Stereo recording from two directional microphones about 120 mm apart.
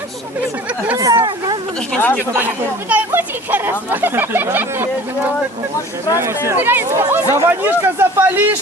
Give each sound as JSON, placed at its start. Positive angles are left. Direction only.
{"t": 1.1, "sound": "speech", "side_deg": -40}
{"t": 1.9, "sound": "speech", "side_deg": 15}
{"t": 2.9, "sound": "speech", "side_deg": -15}
{"t": 6.1, "sound": "a man's voice", "side_deg": -20}